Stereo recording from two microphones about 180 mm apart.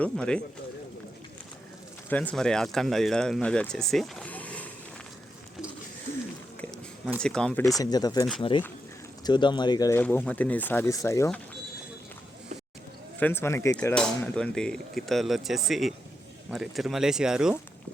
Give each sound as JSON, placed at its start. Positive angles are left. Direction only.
{"t": 0.0, "sound": "speech", "side_deg": 5}
{"t": 2.0, "sound": "speech", "side_deg": 5}
{"t": 6.6, "sound": "a sound", "side_deg": 5}
{"t": 7.2, "sound": "speech", "side_deg": 5}
{"t": 7.8, "sound": "speech", "side_deg": 20}
{"t": 10.0, "sound": "speech", "side_deg": 10}
{"t": 13.1, "sound": "speech", "side_deg": 10}
{"t": 13.9, "sound": "speech", "side_deg": 5}